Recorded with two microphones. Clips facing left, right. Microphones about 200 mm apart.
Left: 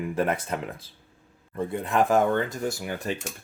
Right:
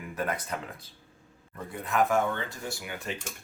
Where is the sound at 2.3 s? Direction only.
45° left (ahead or behind).